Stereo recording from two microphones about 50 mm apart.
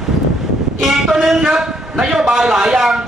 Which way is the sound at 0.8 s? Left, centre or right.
Centre.